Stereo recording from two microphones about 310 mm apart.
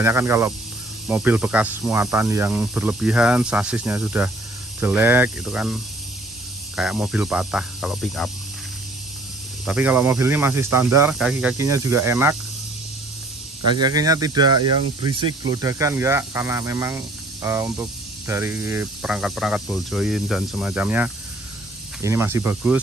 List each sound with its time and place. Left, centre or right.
0.0 s speech: centre
6.8 s speech: centre
9.7 s speech: centre
13.7 s speech: centre